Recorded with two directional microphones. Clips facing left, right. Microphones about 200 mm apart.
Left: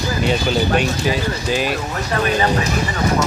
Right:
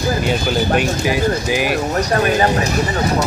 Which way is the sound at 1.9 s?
40° right (ahead or behind).